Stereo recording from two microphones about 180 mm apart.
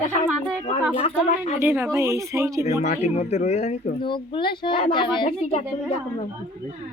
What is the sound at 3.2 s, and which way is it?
Speech, 40° left (ahead or behind).